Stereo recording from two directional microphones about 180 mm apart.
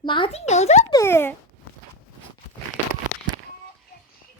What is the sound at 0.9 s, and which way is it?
Speech, 15° left (ahead or behind).